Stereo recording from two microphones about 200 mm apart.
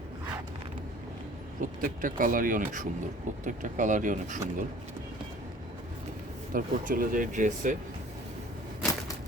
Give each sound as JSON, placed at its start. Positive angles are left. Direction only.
{"t": 1.6, "sound": "speech", "side_deg": -45}
{"t": 6.5, "sound": "speech", "side_deg": -45}